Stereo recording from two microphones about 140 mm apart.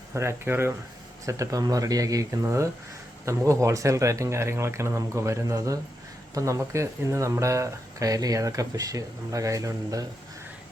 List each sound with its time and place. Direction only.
0.1 s speech: 20° right (ahead or behind)